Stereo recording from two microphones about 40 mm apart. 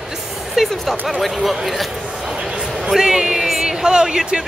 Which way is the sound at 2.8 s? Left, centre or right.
Centre.